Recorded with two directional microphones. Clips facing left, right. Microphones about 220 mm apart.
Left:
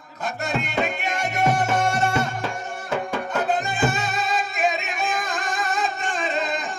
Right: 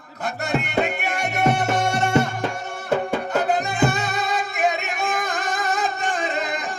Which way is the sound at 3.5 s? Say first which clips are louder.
Right 2 dB; 65° right (ahead or behind).